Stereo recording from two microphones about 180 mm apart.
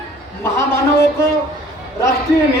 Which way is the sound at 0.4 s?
15° left (ahead or behind).